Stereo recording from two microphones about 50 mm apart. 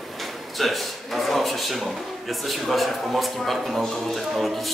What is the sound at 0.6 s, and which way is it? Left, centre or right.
Speech, centre.